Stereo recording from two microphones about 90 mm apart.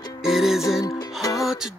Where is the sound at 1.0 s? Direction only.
40° left (ahead or behind).